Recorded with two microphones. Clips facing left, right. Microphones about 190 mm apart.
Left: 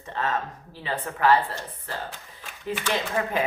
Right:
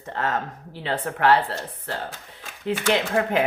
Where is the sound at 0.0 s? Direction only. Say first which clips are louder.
Right 2 dB; 60° right (ahead or behind).